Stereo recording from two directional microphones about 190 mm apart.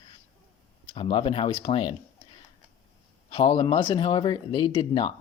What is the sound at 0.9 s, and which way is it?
Speech, 30° left (ahead or behind).